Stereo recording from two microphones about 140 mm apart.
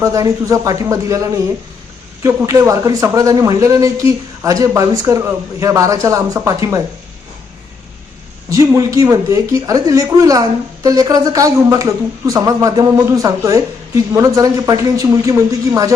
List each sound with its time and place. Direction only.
0.0 s speech: 25° right (ahead or behind)
8.4 s speech: 25° right (ahead or behind)